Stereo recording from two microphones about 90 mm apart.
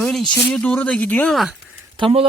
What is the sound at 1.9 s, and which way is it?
Speech, 75° right (ahead or behind).